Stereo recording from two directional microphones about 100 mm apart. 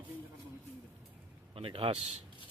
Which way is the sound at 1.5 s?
65° right (ahead or behind).